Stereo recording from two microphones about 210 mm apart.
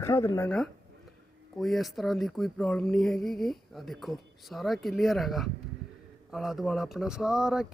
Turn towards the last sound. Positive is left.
turn(degrees=-5)  # may be behind; listen again after turning